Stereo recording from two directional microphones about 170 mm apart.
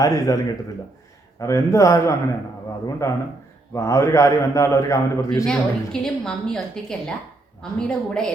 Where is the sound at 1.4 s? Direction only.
20° left (ahead or behind).